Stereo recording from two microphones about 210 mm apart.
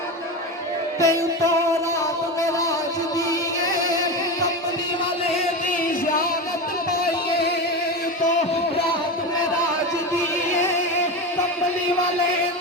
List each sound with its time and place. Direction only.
0.9 s music: 15° left (ahead or behind)
3.8 s music: 15° left (ahead or behind)